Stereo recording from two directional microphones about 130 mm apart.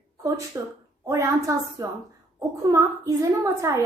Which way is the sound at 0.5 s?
20° right (ahead or behind).